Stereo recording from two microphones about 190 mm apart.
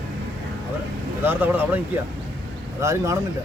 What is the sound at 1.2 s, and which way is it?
Speech, 10° right (ahead or behind).